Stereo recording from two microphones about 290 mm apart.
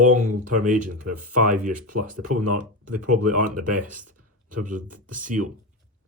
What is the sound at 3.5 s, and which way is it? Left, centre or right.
Speech, right.